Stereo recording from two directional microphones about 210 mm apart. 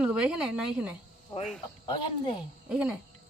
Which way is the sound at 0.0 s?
5° right (ahead or behind).